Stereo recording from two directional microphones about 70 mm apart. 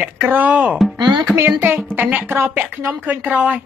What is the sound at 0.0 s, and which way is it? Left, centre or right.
Speech, right.